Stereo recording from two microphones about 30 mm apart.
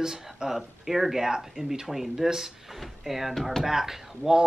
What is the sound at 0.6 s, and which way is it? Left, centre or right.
Speech, centre.